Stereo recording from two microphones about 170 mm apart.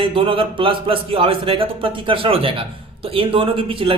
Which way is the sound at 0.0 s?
30° right (ahead or behind).